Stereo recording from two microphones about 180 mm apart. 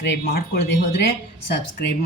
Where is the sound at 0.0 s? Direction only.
70° left (ahead or behind).